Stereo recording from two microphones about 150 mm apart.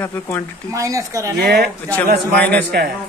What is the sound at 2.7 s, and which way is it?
Speech, 90° right.